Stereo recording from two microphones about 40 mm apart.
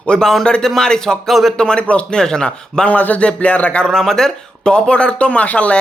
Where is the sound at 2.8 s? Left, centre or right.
Left.